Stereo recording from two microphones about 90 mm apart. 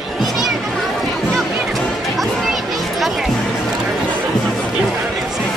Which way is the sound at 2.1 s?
Centre (ahead or behind).